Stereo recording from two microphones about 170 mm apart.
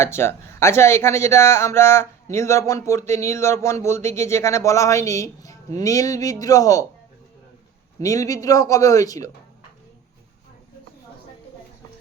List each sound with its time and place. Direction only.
0.0 s a man's voice: 15° left (ahead or behind)
8.0 s a man's voice: 20° left (ahead or behind)